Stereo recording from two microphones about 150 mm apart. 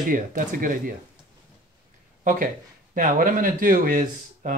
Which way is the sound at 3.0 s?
65° right (ahead or behind).